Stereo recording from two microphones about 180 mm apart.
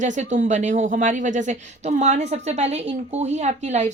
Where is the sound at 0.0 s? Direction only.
40° right (ahead or behind).